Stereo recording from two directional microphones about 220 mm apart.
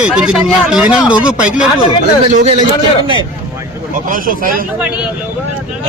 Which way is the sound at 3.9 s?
35° right (ahead or behind).